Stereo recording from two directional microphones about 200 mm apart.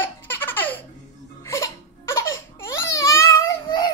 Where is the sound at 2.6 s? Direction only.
15° left (ahead or behind).